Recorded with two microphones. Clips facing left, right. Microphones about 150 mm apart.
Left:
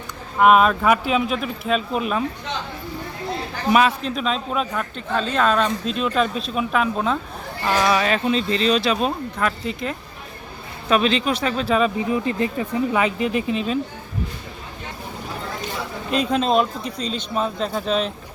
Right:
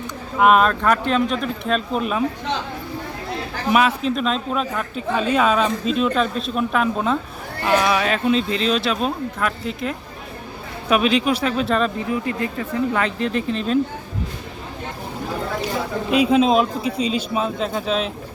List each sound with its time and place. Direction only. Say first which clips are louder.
0.3 s a man's voice: left 1 dB; centre (ahead or behind)
3.7 s a man's voice: even; centre (ahead or behind)
12.2 s speech: left 2 dB; 25° left (ahead or behind)
12.9 s speech: left 1 dB; 10° left (ahead or behind)
16.1 s a man's voice: right 3 dB; 5° right (ahead or behind)